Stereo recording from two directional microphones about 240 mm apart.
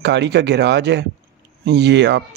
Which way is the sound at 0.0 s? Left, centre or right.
Right.